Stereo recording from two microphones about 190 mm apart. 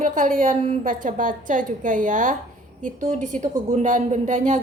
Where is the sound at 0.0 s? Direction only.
45° right (ahead or behind).